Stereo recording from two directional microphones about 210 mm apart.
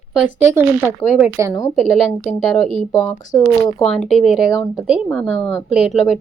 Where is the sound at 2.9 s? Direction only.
15° left (ahead or behind).